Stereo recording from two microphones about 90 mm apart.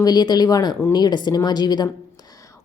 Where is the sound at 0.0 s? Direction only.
50° left (ahead or behind).